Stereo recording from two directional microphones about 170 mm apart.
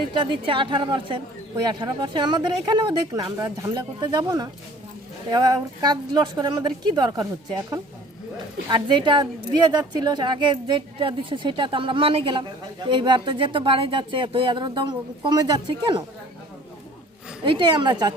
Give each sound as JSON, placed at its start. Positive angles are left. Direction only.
{"t": 0.1, "sound": "a woman's voice", "side_deg": -30}
{"t": 17.4, "sound": "a woman's voice", "side_deg": -30}